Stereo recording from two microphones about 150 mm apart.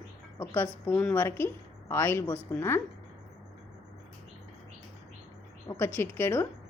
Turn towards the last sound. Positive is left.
turn(degrees=15)  # may be behind; listen again after turning